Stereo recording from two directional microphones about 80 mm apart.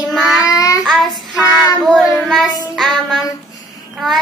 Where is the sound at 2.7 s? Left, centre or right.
Centre.